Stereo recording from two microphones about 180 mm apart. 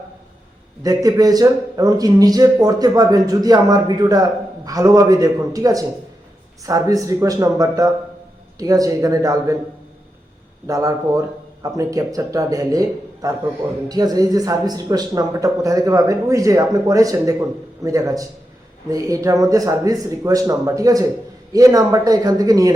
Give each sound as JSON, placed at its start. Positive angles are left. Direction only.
{"t": 0.8, "sound": "a man's voice", "side_deg": -20}
{"t": 10.7, "sound": "a man's voice", "side_deg": -20}